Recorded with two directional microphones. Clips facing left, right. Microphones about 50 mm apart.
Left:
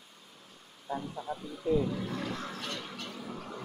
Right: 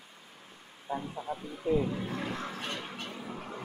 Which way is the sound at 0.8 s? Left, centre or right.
Centre.